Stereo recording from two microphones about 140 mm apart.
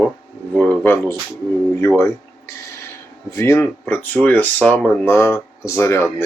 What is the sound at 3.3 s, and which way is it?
Speech, 20° left (ahead or behind).